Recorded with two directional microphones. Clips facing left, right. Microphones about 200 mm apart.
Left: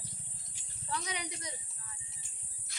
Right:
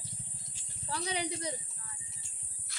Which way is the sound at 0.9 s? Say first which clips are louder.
Right 4 dB; 30° right (ahead or behind).